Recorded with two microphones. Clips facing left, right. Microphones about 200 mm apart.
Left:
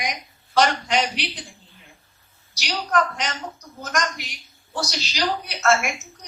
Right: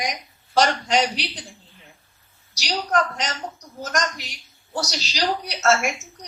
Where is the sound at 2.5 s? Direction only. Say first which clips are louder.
Even; 40° right (ahead or behind).